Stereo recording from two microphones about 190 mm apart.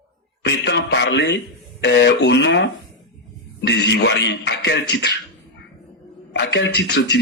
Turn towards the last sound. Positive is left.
turn(degrees=60)  # may be behind; listen again after turning